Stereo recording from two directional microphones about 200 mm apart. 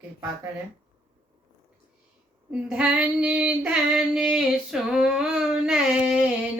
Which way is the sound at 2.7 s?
5° right (ahead or behind).